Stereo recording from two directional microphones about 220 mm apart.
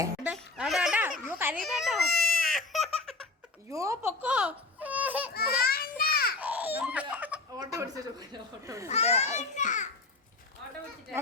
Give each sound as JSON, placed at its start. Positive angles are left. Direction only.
{"t": 0.3, "sound": "a sound", "side_deg": -5}
{"t": 1.5, "sound": "speech", "side_deg": 0}
{"t": 2.5, "sound": "baby laughter", "side_deg": 0}
{"t": 3.7, "sound": "speech", "side_deg": -15}
{"t": 5.3, "sound": "children playing", "side_deg": 45}
{"t": 6.4, "sound": "baby cry", "side_deg": -5}
{"t": 7.6, "sound": "speech", "side_deg": -15}
{"t": 8.9, "sound": "a child's voice", "side_deg": 30}